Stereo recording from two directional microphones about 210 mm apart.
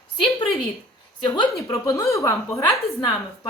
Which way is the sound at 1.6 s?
15° left (ahead or behind).